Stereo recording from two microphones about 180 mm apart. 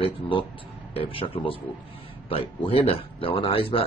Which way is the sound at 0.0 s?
30° left (ahead or behind).